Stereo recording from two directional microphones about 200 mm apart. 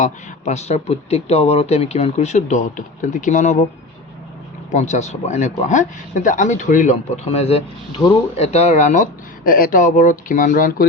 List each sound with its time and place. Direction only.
0.0 s speech: 35° left (ahead or behind)
4.7 s speech: 35° left (ahead or behind)